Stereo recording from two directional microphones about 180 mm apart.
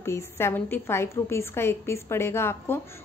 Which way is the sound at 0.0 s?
15° left (ahead or behind).